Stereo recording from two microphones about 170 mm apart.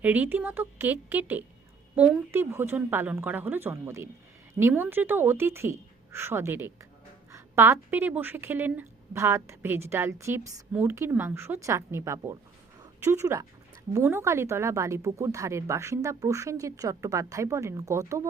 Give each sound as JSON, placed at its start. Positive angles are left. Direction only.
{"t": 0.0, "sound": "a woman's voice", "side_deg": -10}